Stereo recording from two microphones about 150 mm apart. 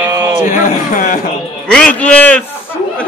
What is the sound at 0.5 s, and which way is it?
Speech, 55° left (ahead or behind).